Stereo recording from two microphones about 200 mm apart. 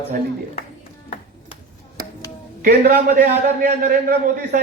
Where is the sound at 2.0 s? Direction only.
45° right (ahead or behind).